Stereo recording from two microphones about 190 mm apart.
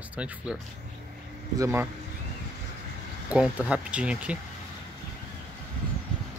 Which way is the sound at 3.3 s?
5° right (ahead or behind).